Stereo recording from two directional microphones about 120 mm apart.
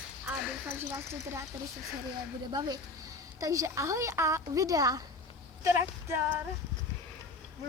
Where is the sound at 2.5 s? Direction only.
35° right (ahead or behind).